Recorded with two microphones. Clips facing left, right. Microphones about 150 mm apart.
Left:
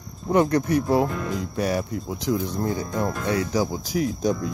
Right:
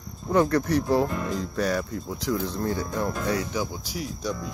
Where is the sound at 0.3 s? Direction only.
20° left (ahead or behind).